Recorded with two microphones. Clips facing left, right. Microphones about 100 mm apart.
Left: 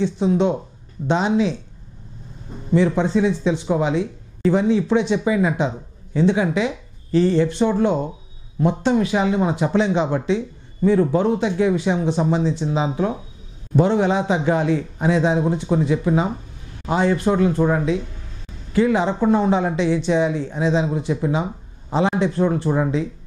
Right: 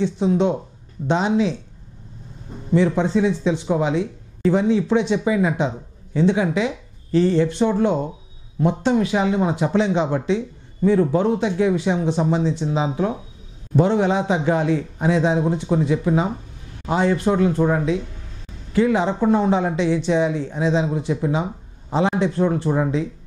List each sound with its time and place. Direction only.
0.0 s speech: 15° left (ahead or behind)
2.7 s speech: 15° left (ahead or behind)